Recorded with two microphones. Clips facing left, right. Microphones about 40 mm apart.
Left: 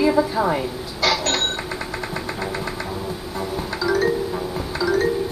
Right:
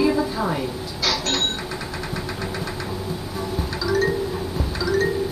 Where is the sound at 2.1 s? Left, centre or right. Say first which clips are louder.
Left 2 dB; centre.